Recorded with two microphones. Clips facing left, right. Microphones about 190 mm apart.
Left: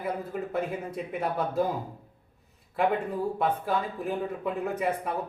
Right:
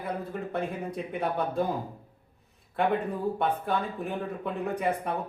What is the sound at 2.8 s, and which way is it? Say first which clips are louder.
Speech: left 1 dB; centre (ahead or behind).